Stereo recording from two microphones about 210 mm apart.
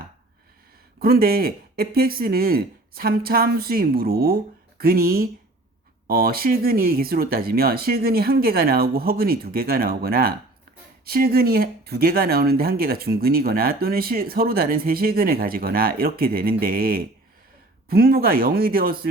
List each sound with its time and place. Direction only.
0.9 s speech: 45° right (ahead or behind)